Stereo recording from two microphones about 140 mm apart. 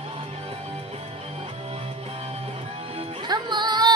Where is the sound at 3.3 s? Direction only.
30° right (ahead or behind).